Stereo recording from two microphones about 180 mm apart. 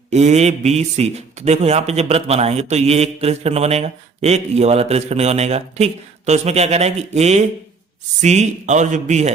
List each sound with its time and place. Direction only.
0.1 s a man's voice: 40° right (ahead or behind)